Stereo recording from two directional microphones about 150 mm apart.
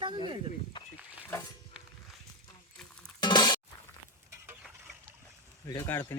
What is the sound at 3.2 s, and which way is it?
Music, 30° left (ahead or behind).